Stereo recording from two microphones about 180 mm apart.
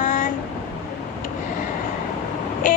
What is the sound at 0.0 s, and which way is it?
Vehicle, 45° left (ahead or behind).